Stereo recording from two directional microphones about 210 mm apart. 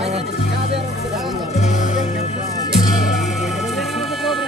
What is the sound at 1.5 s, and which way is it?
Music, 35° left (ahead or behind).